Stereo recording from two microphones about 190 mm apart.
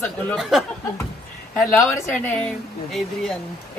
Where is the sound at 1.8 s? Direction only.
15° left (ahead or behind).